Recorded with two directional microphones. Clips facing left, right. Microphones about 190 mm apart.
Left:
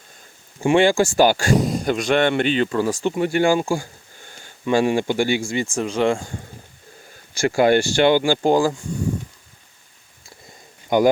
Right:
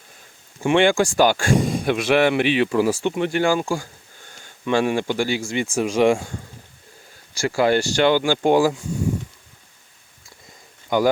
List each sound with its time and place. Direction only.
0.6 s speech: 10° left (ahead or behind); by 3.0 s 10° right (ahead or behind)
3.0 s speech: 5° left (ahead or behind)
5.6 s speech: 10° right (ahead or behind)
7.3 s speech: 20° left (ahead or behind)
7.9 s speech: 10° left (ahead or behind)
10.8 s speech: 20° left (ahead or behind)